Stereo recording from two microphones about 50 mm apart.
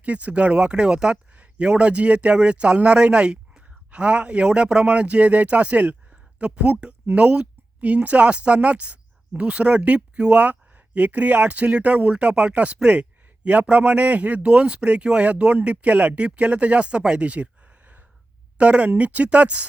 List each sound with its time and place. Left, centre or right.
0.0 s a man's voice: right